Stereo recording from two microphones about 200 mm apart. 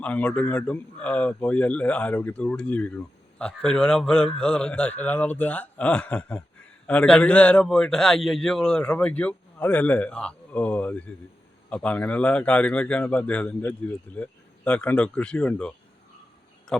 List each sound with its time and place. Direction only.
0.0 s speech: 5° left (ahead or behind)